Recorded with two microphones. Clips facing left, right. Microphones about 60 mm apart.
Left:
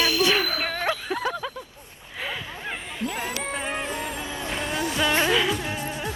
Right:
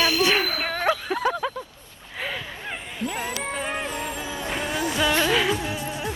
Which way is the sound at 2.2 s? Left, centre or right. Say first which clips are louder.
Right 1 dB; centre.